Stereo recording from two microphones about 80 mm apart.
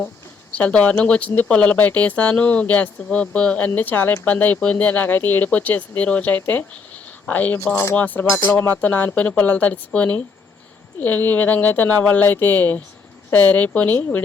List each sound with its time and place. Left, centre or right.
0.5 s speech: centre
3.7 s speech: left